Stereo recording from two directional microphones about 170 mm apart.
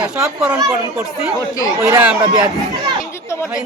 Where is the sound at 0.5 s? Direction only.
20° right (ahead or behind).